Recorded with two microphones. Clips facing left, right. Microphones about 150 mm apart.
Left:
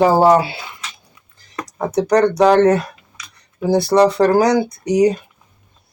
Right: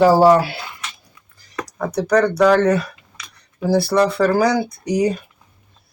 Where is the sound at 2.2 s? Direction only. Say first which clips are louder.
Left 1 dB; 20° left (ahead or behind).